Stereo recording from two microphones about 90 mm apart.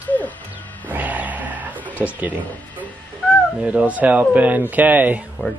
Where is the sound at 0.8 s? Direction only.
20° right (ahead or behind).